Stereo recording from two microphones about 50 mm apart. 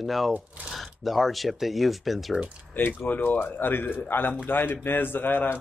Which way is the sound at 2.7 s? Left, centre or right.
Left.